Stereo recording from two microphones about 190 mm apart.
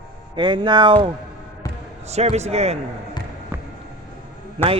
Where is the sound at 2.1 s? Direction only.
35° right (ahead or behind).